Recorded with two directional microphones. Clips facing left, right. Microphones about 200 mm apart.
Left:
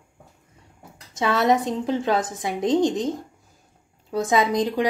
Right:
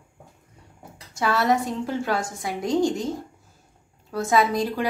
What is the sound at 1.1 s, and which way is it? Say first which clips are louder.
A woman's voice: left 2 dB; 20° left (ahead or behind).